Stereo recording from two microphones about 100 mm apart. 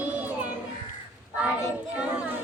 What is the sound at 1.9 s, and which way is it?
Child singing, 10° right (ahead or behind).